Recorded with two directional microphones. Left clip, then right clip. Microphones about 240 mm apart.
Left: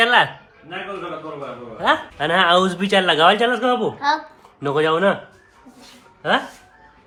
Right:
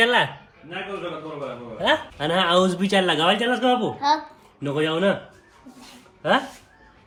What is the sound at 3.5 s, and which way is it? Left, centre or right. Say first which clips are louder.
A man's voice: left 2 dB; centre.